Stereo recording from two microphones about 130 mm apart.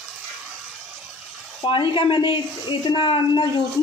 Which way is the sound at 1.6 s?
40° left (ahead or behind).